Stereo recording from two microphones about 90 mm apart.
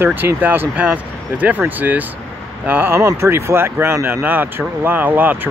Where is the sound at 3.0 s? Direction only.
30° right (ahead or behind).